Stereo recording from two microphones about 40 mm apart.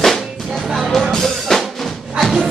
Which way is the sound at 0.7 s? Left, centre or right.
Centre.